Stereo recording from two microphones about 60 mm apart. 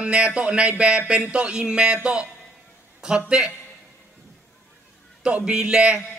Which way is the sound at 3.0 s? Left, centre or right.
Centre.